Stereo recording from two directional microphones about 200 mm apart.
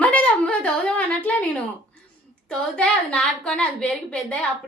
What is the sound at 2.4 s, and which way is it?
A woman's voice, 5° left (ahead or behind).